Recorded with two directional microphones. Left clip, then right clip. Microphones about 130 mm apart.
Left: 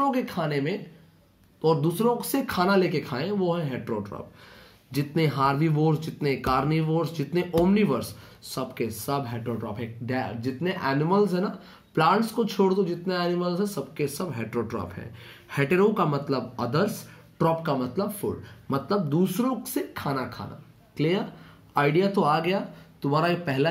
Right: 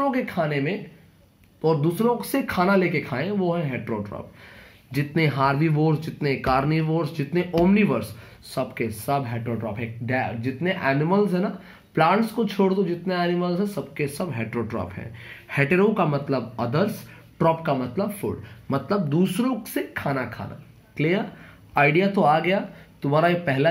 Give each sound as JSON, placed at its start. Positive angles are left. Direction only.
{"t": 0.0, "sound": "speech", "side_deg": 5}
{"t": 22.2, "sound": "speech", "side_deg": 0}